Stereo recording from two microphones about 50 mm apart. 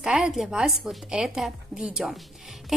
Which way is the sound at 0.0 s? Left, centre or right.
Centre.